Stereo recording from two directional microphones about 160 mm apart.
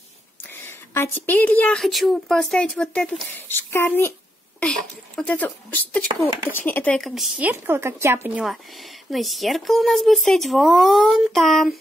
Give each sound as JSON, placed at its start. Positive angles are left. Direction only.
{"t": 0.5, "sound": "a woman's voice", "side_deg": 15}
{"t": 6.1, "sound": "speech", "side_deg": -35}
{"t": 6.5, "sound": "speech", "side_deg": 10}
{"t": 7.3, "sound": "speech", "side_deg": -10}
{"t": 8.5, "sound": "speech", "side_deg": 0}